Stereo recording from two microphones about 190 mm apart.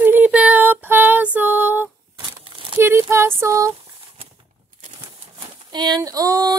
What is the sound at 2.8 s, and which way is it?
Female singing, 15° right (ahead or behind).